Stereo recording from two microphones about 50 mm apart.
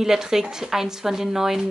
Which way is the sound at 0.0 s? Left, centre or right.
Centre.